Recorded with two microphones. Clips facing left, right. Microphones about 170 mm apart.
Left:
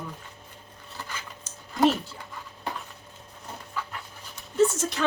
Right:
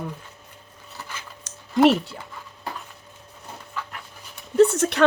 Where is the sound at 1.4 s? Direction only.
70° right (ahead or behind).